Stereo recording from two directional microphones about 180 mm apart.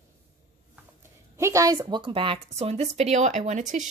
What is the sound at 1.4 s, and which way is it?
Speech, 15° right (ahead or behind).